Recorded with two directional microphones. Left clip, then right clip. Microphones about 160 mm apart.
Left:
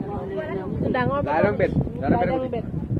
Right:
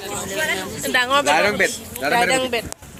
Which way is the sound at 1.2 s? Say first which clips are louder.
Right 4 dB; 60° right (ahead or behind).